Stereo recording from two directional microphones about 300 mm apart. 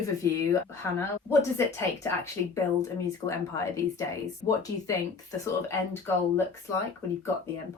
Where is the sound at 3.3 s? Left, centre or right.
Centre.